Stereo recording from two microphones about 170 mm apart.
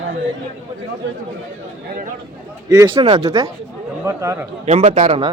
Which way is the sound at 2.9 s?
30° right (ahead or behind).